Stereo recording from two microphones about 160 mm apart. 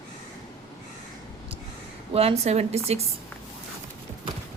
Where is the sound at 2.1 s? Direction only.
40° right (ahead or behind).